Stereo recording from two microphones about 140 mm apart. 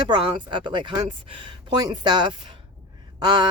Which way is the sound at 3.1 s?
30° right (ahead or behind).